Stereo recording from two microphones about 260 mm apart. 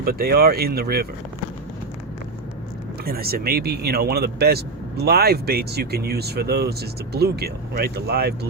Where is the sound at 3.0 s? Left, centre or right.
Right.